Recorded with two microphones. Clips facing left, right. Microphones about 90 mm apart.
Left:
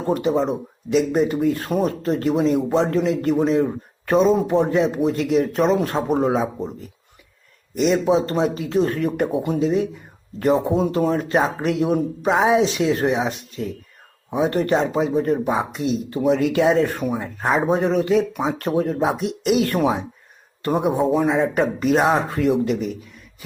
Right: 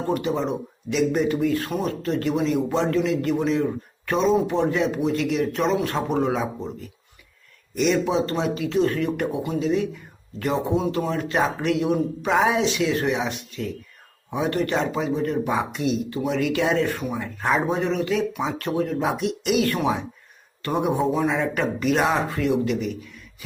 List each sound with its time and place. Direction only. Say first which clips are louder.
0.1 s speech: left 5 dB; 30° left (ahead or behind)
8.0 s speech: left 4 dB; 30° left (ahead or behind)